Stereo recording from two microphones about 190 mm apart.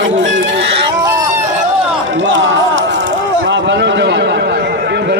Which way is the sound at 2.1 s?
80° right.